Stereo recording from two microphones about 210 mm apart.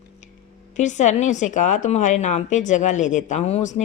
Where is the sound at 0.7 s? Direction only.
35° left (ahead or behind).